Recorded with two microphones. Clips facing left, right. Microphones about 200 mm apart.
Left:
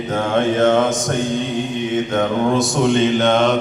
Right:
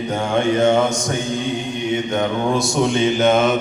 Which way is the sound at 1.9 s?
Centre (ahead or behind).